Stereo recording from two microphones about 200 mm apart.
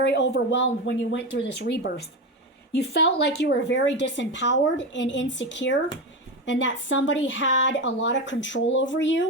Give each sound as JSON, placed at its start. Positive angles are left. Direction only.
{"t": 0.0, "sound": "speech", "side_deg": 60}